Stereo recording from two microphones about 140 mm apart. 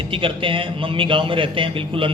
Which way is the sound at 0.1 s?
40° right (ahead or behind).